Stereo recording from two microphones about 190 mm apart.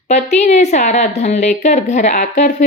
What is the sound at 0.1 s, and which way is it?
A woman's voice, 35° left (ahead or behind).